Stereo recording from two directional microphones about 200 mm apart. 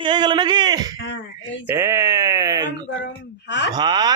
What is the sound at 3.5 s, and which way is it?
Speech, 60° left (ahead or behind).